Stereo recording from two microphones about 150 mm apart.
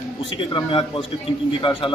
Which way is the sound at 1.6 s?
35° left (ahead or behind).